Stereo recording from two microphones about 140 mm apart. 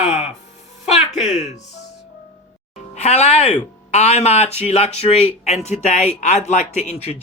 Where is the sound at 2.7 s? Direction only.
50° left (ahead or behind).